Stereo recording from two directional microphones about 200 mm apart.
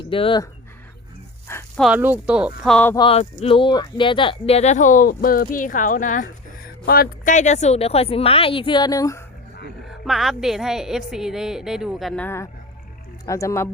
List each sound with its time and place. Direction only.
0.0 s speech: 25° left (ahead or behind)
1.5 s dog: 10° left (ahead or behind)
1.8 s a woman's voice: 5° right (ahead or behind)
2.7 s speech: 10° left (ahead or behind)
3.0 s speech: 30° left (ahead or behind)
10.1 s a woman's voice: centre (ahead or behind); by 13.7 s 15° left (ahead or behind)